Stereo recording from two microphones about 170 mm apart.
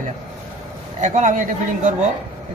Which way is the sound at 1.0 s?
45° right (ahead or behind).